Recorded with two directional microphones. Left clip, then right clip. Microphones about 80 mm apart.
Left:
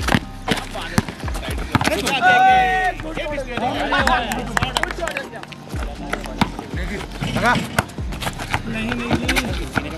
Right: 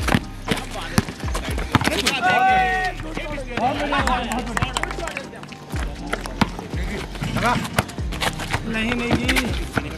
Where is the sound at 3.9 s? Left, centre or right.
Left.